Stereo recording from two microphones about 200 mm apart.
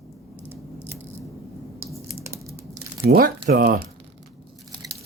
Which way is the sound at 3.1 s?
50° right (ahead or behind).